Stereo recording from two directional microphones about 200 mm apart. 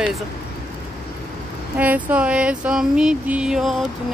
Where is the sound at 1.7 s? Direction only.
10° right (ahead or behind).